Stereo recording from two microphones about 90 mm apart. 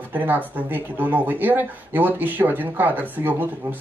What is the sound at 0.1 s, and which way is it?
Speech, 20° right (ahead or behind).